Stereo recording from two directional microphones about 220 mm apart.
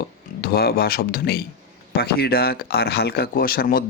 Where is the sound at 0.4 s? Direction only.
45° left (ahead or behind).